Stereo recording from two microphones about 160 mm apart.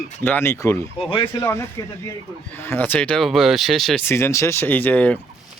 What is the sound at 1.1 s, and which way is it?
Speech, 30° left (ahead or behind).